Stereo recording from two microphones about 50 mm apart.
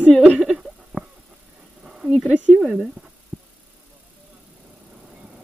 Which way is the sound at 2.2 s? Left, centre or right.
Right.